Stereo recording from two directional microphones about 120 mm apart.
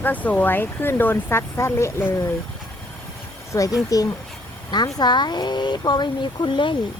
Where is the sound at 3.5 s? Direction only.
25° left (ahead or behind); by 6.8 s 40° left (ahead or behind).